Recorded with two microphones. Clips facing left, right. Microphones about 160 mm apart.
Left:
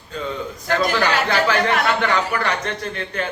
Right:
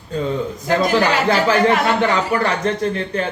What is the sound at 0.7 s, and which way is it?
A man's voice, 30° right (ahead or behind).